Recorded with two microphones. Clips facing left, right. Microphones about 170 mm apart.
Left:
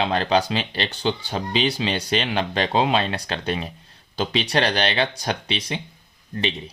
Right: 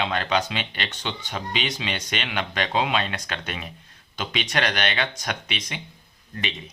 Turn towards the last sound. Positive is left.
turn(degrees=30)  # may be behind; listen again after turning